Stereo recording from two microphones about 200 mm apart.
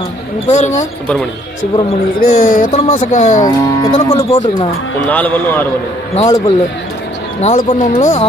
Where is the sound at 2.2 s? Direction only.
45° left (ahead or behind).